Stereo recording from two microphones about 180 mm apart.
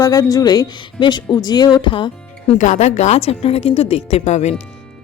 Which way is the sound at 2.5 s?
40° left (ahead or behind).